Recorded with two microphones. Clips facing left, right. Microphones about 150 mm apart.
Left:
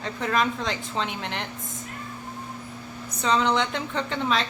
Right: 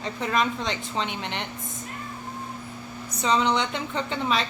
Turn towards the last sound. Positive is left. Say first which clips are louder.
# even
turn(degrees=-5)  # may be behind; listen again after turning